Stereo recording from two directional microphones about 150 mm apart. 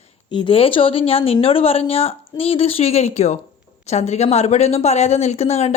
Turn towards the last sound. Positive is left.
turn(degrees=45)  # may be behind; listen again after turning